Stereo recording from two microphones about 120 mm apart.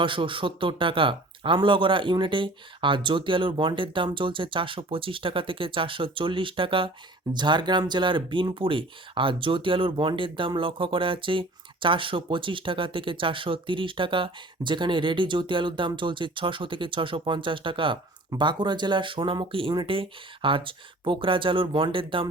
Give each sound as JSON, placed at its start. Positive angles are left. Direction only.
{"t": 0.0, "sound": "speech", "side_deg": -45}